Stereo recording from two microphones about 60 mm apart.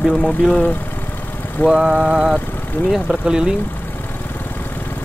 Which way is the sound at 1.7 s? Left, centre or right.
Centre.